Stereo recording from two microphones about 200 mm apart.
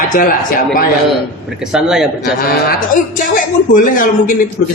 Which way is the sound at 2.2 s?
50° left (ahead or behind).